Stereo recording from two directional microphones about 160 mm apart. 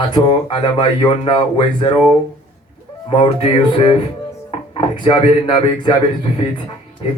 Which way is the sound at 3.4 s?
35° left (ahead or behind).